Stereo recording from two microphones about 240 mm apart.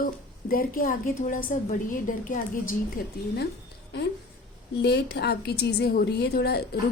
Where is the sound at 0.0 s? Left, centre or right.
Left.